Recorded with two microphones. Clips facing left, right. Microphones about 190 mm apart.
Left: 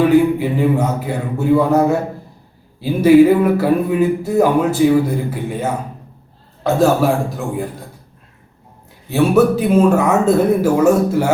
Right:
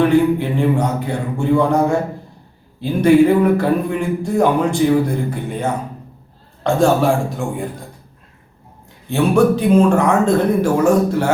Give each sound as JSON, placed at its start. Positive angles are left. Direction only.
{"t": 0.0, "sound": "speech", "side_deg": 5}
{"t": 9.0, "sound": "speech", "side_deg": 5}